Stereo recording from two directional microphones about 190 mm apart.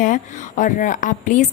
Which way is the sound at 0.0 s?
40° left (ahead or behind).